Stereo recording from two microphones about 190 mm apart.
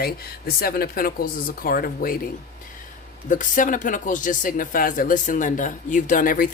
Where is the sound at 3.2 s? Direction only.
40° left (ahead or behind).